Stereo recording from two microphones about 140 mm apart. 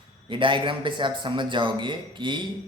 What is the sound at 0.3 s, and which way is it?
A man's voice, 35° right (ahead or behind).